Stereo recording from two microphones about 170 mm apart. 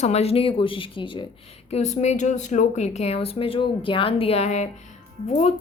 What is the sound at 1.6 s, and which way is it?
Speech, 40° left (ahead or behind).